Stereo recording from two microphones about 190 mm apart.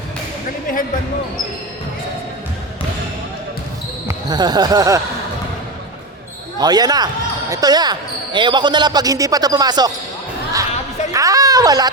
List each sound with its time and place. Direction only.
4.3 s speech: 20° right (ahead or behind)
6.6 s speech: 20° right (ahead or behind)
11.1 s speech: 15° right (ahead or behind)